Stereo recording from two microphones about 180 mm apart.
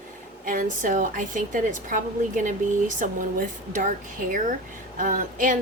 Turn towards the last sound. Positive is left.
turn(degrees=-50)  # may be behind; listen again after turning